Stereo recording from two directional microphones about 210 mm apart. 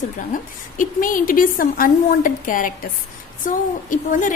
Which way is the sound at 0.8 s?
40° left (ahead or behind).